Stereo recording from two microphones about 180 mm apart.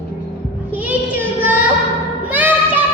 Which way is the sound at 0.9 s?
10° right (ahead or behind).